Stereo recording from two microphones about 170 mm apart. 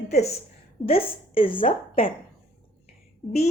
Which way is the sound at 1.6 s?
30° left (ahead or behind).